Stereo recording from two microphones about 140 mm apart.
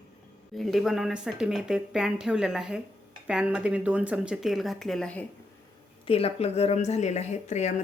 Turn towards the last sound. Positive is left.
turn(degrees=55)  # may be behind; listen again after turning